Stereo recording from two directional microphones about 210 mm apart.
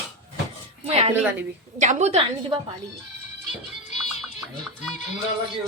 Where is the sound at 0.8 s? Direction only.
30° right (ahead or behind).